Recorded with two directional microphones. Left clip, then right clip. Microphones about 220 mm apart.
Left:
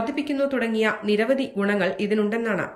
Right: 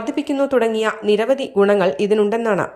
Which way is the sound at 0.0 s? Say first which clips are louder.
Right 4 dB; 20° right (ahead or behind).